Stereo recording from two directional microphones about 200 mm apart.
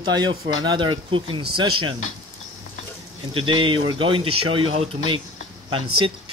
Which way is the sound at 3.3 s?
25° right (ahead or behind).